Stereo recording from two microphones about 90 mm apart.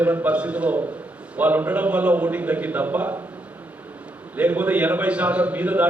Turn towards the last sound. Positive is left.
turn(degrees=-15)  # may be behind; listen again after turning